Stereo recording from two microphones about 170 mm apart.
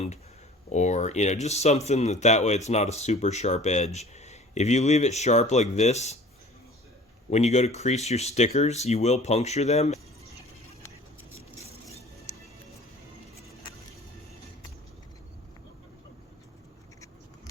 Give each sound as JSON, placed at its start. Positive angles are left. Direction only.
{"t": 0.7, "sound": "speech", "side_deg": 45}
{"t": 7.3, "sound": "speech", "side_deg": 40}
{"t": 11.6, "sound": "a sound", "side_deg": -35}